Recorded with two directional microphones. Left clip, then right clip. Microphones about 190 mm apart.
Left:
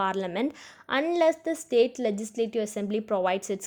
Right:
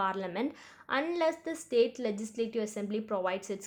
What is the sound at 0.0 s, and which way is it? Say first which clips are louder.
Speech: left 5 dB; 35° left (ahead or behind).